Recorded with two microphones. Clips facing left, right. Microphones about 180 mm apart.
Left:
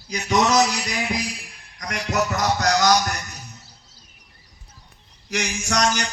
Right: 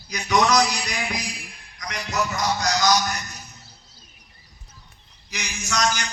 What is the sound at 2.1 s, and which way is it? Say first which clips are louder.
Speech: left 2 dB; 65° left (ahead or behind).